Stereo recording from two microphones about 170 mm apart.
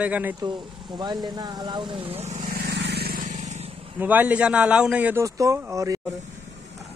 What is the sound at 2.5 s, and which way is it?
Vehicle, 80° right.